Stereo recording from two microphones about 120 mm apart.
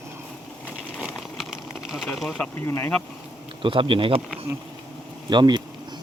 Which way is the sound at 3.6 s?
45° right (ahead or behind).